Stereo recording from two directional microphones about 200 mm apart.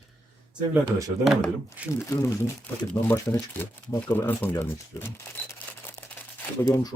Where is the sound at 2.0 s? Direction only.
15° left (ahead or behind).